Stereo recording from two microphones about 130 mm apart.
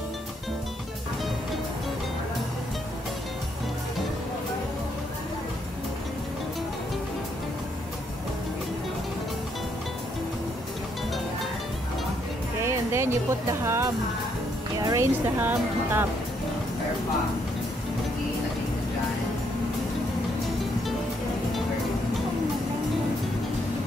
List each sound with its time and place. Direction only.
12.6 s speech: 20° right (ahead or behind)
14.8 s speech: 30° right (ahead or behind)
15.2 s a woman's voice: 15° right (ahead or behind)